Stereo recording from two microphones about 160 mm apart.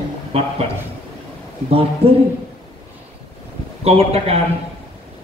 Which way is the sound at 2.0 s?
40° right (ahead or behind).